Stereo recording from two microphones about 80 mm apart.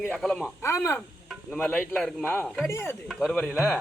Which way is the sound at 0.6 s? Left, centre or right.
Left.